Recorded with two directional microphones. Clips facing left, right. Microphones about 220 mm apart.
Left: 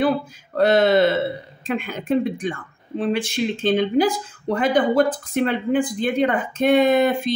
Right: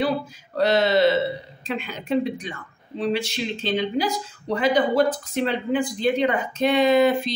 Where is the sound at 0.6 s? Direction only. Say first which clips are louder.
Left 3 dB; 50° left (ahead or behind).